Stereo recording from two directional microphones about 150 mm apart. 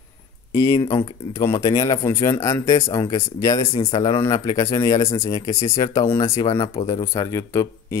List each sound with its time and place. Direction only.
0.5 s speech: 20° left (ahead or behind)